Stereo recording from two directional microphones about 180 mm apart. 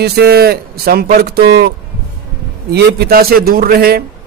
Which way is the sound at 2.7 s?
60° right (ahead or behind).